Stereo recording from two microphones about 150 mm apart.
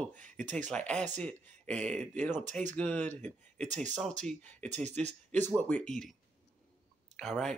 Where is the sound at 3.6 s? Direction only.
55° right (ahead or behind).